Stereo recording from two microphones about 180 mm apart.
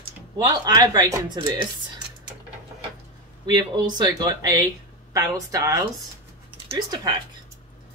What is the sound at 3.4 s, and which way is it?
Speech, 25° right (ahead or behind).